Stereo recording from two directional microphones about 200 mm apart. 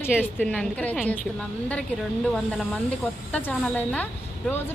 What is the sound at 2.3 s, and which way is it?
Speech, centre (ahead or behind).